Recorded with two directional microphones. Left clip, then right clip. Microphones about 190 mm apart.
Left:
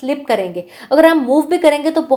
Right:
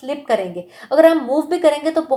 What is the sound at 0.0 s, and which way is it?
A woman's voice, 30° left (ahead or behind).